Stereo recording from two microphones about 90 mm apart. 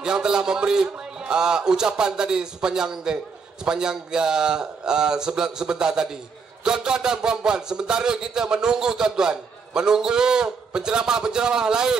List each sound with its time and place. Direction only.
0.0 s a man's voice: 10° right (ahead or behind)